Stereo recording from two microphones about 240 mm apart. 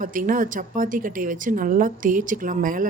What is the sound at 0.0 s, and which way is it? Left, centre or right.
A woman's voice, right.